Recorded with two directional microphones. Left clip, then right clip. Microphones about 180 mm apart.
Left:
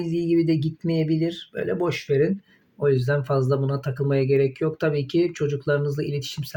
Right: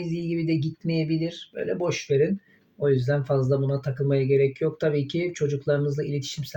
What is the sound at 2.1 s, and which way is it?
Speech, 35° left (ahead or behind).